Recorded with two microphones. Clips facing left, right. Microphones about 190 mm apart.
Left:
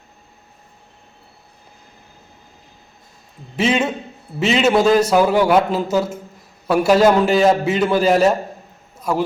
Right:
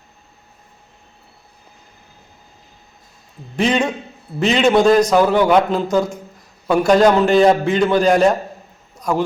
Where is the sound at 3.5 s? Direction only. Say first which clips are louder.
Right 1 dB; 5° left (ahead or behind).